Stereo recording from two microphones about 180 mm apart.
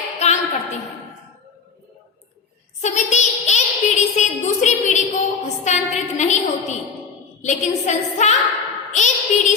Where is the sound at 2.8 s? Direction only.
40° left (ahead or behind).